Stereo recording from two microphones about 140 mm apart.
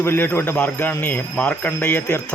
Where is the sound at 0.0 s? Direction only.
15° left (ahead or behind).